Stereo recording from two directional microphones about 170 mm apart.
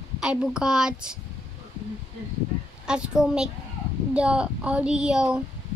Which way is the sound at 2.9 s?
5° right (ahead or behind).